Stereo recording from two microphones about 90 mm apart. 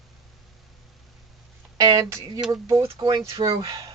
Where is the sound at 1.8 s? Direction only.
45° right (ahead or behind).